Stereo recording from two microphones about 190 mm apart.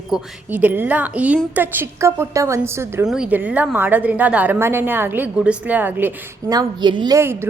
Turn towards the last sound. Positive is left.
turn(degrees=-15)  # may be behind; listen again after turning